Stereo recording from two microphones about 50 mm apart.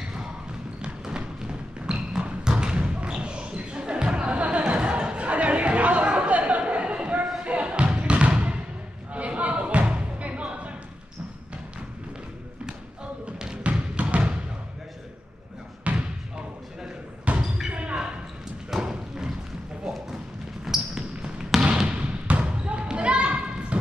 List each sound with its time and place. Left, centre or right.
0.8 s a sound: centre
7.4 s bouncing: right
9.1 s music: right
13.4 s basketball bounce: centre
13.7 s music: right
15.9 s a sound: right
17.4 s basketball bounce: centre
18.7 s thump: centre
20.6 s basketball bounce: centre